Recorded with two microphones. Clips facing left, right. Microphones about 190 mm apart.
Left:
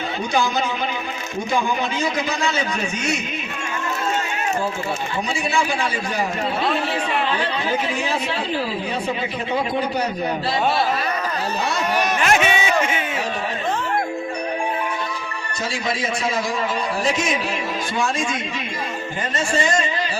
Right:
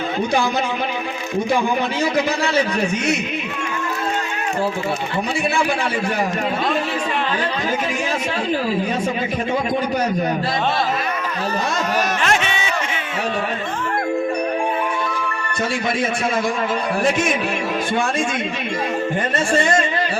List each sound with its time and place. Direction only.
12.2 s a sound: 5° left (ahead or behind)
17.0 s music: 55° right (ahead or behind)
19.5 s music: 60° right (ahead or behind)